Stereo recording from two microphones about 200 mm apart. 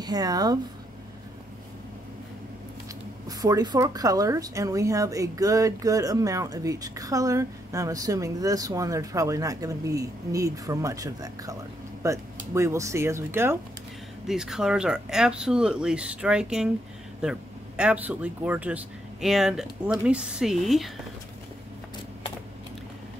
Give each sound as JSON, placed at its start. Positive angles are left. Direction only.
{"t": 0.0, "sound": "speech", "side_deg": -20}
{"t": 3.3, "sound": "speech", "side_deg": -20}